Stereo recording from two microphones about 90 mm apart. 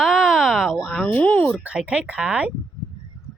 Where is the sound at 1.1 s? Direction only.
15° left (ahead or behind).